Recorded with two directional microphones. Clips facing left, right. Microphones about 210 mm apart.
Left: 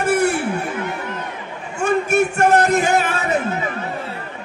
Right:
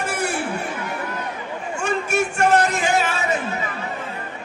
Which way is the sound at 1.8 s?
55° left (ahead or behind).